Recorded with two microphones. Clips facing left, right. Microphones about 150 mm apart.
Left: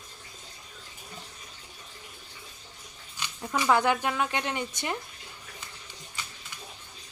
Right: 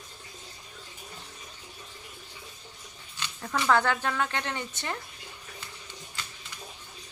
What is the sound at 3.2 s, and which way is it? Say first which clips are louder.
Speech: left 1 dB; 15° left (ahead or behind).